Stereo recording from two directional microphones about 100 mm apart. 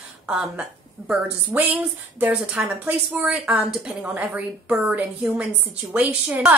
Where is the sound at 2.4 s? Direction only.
5° right (ahead or behind).